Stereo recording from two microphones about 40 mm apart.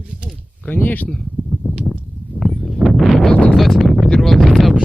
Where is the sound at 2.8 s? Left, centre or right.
Centre.